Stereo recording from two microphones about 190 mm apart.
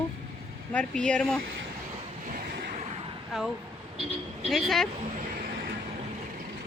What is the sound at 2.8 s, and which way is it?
Vehicle, 30° right (ahead or behind).